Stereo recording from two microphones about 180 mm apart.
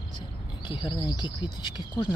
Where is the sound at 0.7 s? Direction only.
25° left (ahead or behind).